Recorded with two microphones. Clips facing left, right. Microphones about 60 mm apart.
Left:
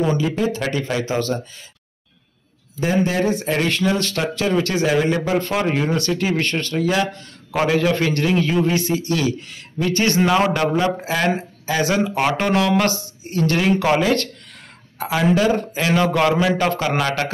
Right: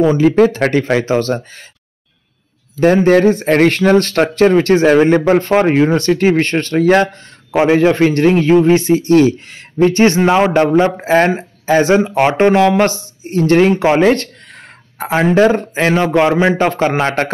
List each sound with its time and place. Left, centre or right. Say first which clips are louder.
0.2 s a man's voice: right 11 dB; right
2.8 s a man's voice: right 10 dB; right
7.5 s a man's voice: right 7 dB; right
15.9 s a man's voice: right 4 dB; right